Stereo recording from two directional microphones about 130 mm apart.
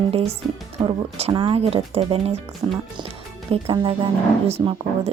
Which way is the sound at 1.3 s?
35° right (ahead or behind).